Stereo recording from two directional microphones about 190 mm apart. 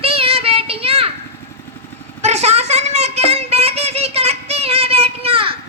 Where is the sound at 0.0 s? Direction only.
30° right (ahead or behind).